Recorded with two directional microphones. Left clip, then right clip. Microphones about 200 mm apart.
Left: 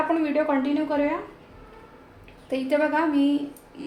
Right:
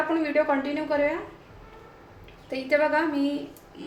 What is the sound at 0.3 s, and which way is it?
Speech, 20° left (ahead or behind).